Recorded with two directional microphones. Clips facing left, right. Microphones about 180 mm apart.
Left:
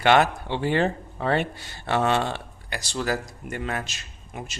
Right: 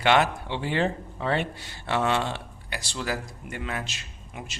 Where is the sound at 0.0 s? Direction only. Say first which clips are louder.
Left 3 dB; 45° left (ahead or behind).